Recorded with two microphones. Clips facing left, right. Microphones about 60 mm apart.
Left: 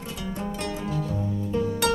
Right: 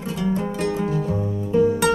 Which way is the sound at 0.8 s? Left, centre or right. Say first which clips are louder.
Right 6 dB; right.